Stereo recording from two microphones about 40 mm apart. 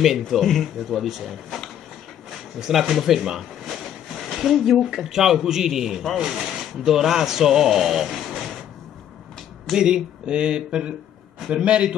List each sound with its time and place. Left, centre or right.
0.3 s a man's voice: centre
2.6 s a man's voice: centre
9.8 s speech: right